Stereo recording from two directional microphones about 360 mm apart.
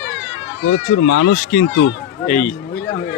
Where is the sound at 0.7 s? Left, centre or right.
Left.